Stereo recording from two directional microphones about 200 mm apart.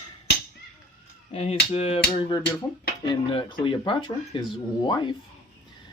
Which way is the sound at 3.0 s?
25° left (ahead or behind).